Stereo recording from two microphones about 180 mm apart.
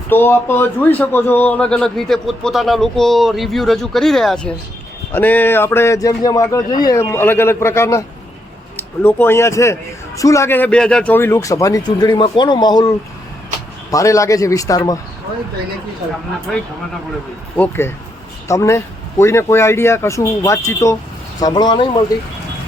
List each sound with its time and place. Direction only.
0.1 s a man's voice: 10° left (ahead or behind)
17.6 s a man's voice: 15° left (ahead or behind)